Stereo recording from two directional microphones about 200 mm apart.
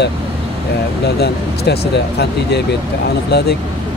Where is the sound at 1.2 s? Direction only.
55° left (ahead or behind).